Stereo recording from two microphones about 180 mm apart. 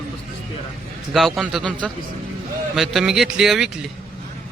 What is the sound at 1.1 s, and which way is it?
A man's voice, centre (ahead or behind).